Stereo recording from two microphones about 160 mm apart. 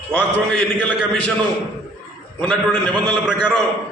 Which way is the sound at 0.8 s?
5° left (ahead or behind).